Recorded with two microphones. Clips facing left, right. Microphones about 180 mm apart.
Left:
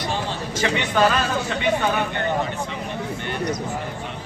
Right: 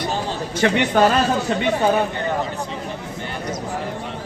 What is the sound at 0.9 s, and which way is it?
Speech, 40° right (ahead or behind).